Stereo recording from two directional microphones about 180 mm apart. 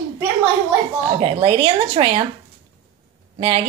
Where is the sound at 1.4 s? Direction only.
30° right (ahead or behind).